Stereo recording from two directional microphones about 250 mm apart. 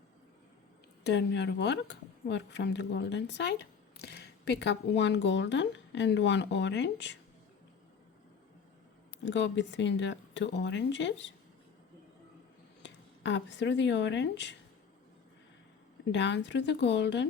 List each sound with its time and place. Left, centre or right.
1.0 s speech: left
9.2 s speech: left
12.8 s speech: left
16.1 s speech: left